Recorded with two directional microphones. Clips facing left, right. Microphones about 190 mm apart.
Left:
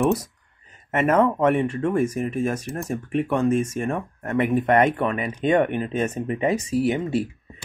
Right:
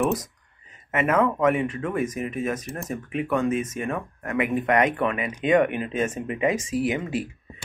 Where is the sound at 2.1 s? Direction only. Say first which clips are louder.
Left 3 dB; 40° left (ahead or behind).